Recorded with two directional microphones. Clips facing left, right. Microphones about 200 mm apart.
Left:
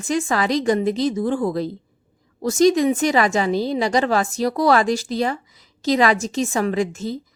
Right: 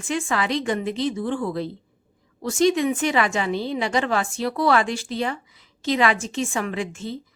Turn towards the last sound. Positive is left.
turn(degrees=40)  # may be behind; listen again after turning